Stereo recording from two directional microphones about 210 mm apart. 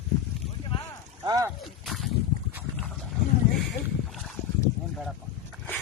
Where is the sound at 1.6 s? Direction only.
Centre (ahead or behind).